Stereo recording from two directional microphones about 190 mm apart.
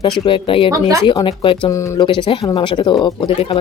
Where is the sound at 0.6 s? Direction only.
15° right (ahead or behind).